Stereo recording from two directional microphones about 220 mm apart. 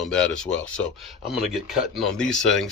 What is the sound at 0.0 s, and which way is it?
Speech, 5° left (ahead or behind).